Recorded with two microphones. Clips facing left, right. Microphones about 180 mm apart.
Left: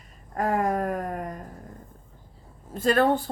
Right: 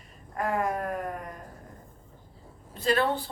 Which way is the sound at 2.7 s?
50° left (ahead or behind).